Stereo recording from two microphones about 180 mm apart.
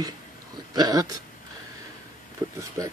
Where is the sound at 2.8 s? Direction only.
15° right (ahead or behind).